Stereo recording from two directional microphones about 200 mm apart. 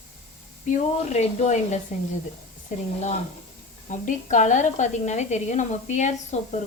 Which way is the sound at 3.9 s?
40° left (ahead or behind).